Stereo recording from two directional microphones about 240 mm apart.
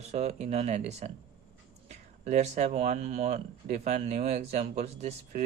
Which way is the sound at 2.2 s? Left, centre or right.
Right.